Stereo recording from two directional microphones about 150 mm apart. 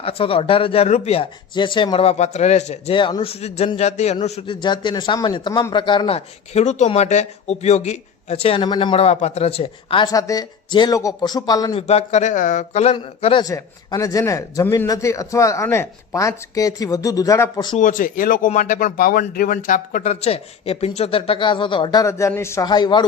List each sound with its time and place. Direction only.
0.0 s speech: 40° left (ahead or behind)
2.9 s speech: 35° left (ahead or behind)
4.4 s speech: 30° left (ahead or behind)
10.1 s speech: 25° left (ahead or behind)
11.7 s speech: 45° left (ahead or behind)
13.4 s speech: 25° left (ahead or behind)
17.7 s speech: 60° left (ahead or behind); by 22.0 s 30° left (ahead or behind)
22.0 s speech: 20° left (ahead or behind)